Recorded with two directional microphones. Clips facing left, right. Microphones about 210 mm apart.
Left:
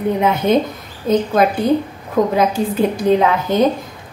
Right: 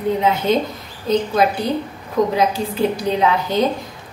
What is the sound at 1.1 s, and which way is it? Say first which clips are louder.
A woman's voice: left 2 dB; 50° left (ahead or behind).